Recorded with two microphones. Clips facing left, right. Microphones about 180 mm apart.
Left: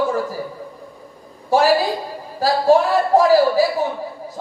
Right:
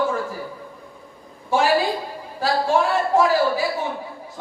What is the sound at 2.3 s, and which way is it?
A woman's voice, 40° left (ahead or behind).